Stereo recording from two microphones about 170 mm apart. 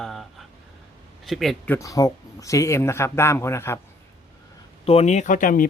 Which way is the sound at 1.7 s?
20° left (ahead or behind).